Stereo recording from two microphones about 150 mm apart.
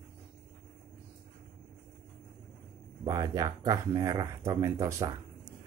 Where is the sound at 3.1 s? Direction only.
25° right (ahead or behind).